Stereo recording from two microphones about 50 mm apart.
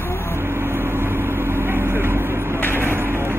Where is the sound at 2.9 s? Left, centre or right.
Right.